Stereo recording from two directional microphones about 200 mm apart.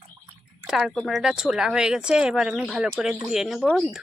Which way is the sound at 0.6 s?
Centre (ahead or behind).